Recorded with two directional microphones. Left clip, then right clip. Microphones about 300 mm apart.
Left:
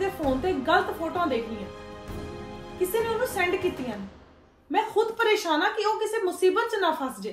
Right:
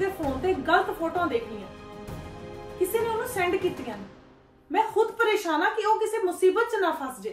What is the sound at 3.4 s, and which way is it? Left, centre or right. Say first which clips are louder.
Speech: even; centre.